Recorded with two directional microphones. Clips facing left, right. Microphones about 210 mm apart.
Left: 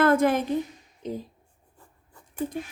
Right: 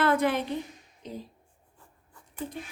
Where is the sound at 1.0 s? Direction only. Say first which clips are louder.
Left 7 dB; 50° left (ahead or behind).